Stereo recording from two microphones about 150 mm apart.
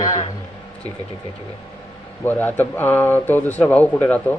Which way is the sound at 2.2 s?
10° left (ahead or behind).